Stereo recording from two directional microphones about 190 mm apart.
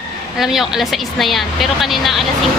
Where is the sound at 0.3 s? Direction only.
Centre (ahead or behind).